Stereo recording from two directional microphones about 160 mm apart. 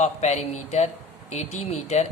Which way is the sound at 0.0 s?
45° left (ahead or behind).